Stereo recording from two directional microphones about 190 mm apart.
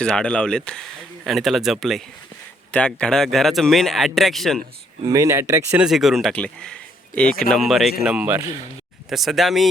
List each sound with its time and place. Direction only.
0.0 s speech: 5° left (ahead or behind)
5.0 s speech: 15° right (ahead or behind)
5.8 s speech: centre (ahead or behind)